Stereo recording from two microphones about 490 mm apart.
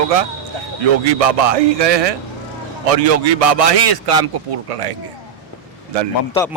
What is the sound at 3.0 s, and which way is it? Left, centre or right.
Speech, right.